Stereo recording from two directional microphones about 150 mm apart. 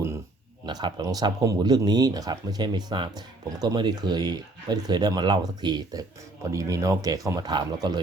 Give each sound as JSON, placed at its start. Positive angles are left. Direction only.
{"t": 0.6, "sound": "speech", "side_deg": -30}